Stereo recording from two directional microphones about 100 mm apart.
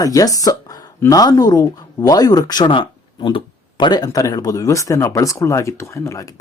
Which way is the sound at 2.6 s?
55° left (ahead or behind).